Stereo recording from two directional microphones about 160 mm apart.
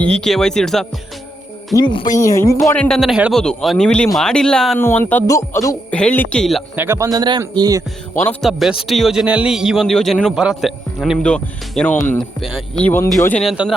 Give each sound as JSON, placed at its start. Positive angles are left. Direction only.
{"t": 0.0, "sound": "a man's voice", "side_deg": 5}
{"t": 1.7, "sound": "speech", "side_deg": 30}
{"t": 2.1, "sound": "speech", "side_deg": 20}
{"t": 2.7, "sound": "a man's voice", "side_deg": 5}
{"t": 5.9, "sound": "speech", "side_deg": 10}
{"t": 6.7, "sound": "a man's voice", "side_deg": -15}
{"t": 8.2, "sound": "a man's voice", "side_deg": 10}
{"t": 13.4, "sound": "a man's voice", "side_deg": 0}